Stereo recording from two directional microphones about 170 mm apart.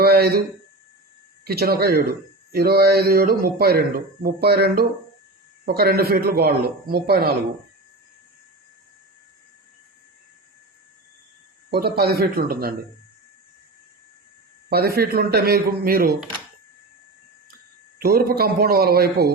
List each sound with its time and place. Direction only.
0.0 s a sound: 65° right (ahead or behind)
1.5 s speech: 65° right (ahead or behind)
11.7 s speech: 65° right (ahead or behind)
14.7 s speech: 65° right (ahead or behind)
18.0 s speech: 60° right (ahead or behind)